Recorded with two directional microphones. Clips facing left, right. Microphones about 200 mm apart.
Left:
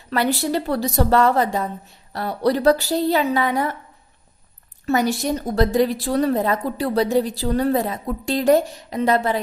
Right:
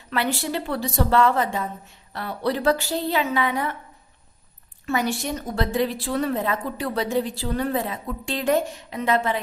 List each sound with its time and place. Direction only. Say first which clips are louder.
0.1 s a woman's voice: left 5 dB; 40° left (ahead or behind)
4.9 s a woman's voice: left 5 dB; 40° left (ahead or behind)